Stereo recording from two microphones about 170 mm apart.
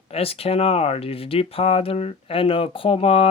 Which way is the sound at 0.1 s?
35° left (ahead or behind).